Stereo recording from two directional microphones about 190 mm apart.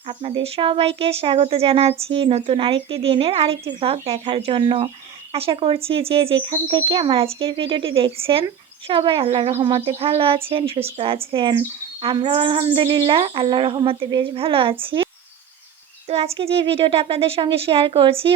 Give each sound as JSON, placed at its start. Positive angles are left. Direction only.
{"t": 0.1, "sound": "speech", "side_deg": -30}
{"t": 16.0, "sound": "speech", "side_deg": -30}